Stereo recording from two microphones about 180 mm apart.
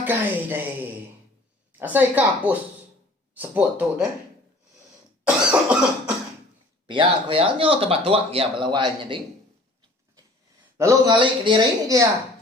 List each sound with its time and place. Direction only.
0.0 s a woman's voice: 10° right (ahead or behind)
5.4 s cough: 5° right (ahead or behind)
6.8 s speech: 25° right (ahead or behind)
10.8 s speech: 20° right (ahead or behind)